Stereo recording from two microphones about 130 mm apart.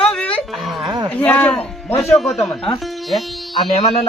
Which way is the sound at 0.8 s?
30° right (ahead or behind).